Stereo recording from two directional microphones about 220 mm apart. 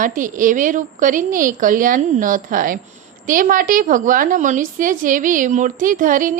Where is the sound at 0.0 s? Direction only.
35° right (ahead or behind).